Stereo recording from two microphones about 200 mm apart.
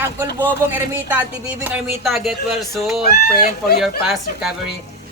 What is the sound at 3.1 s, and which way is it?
Speech, 50° left (ahead or behind).